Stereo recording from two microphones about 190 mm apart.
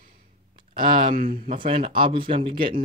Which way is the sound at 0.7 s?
25° right (ahead or behind).